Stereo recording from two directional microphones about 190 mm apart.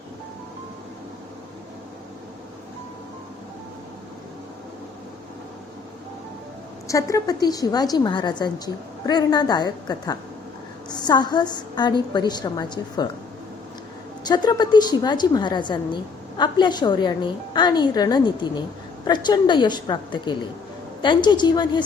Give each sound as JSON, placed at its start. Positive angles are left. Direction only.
{"t": 6.8, "sound": "a woman's voice", "side_deg": 15}
{"t": 14.3, "sound": "a woman's voice", "side_deg": 20}